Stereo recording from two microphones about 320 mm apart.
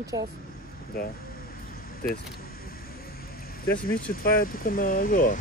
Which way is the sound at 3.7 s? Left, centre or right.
Left.